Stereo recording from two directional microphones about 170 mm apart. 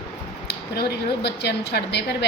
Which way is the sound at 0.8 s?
85° left.